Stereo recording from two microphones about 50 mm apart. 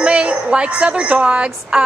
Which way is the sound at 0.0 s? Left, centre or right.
Right.